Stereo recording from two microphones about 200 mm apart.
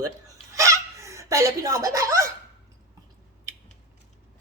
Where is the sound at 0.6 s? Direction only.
15° right (ahead or behind).